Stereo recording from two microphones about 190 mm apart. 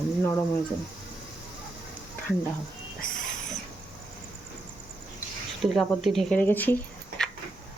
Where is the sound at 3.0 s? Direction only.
45° left (ahead or behind).